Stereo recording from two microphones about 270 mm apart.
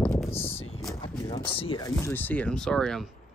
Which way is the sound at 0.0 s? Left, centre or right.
Centre.